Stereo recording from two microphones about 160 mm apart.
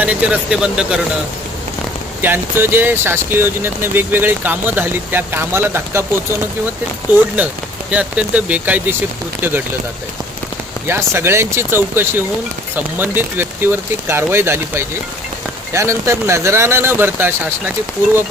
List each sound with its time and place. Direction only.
0.0 s speech: 10° right (ahead or behind)
2.2 s speech: 15° right (ahead or behind)
7.9 s speech: 10° right (ahead or behind)
10.8 s speech: 15° right (ahead or behind)